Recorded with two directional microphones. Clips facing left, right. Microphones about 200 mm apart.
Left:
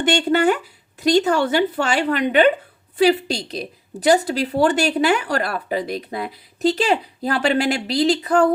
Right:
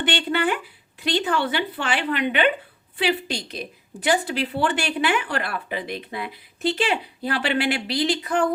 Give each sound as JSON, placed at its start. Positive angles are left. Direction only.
{"t": 0.0, "sound": "a woman's voice", "side_deg": 45}